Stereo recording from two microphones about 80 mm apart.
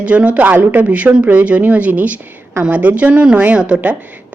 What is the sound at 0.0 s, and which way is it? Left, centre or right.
A woman's voice, centre.